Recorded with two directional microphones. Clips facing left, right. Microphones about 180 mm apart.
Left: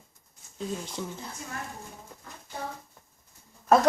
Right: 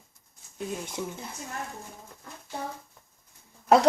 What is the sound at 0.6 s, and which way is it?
Speech, 15° right (ahead or behind).